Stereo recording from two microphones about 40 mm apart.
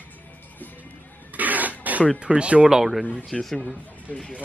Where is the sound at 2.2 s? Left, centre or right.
Right.